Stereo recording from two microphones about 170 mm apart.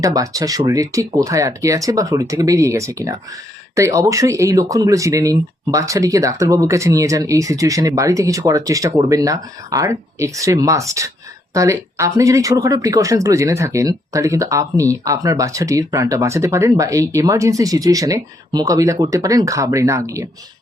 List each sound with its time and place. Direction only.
0.0 s speech: 20° right (ahead or behind)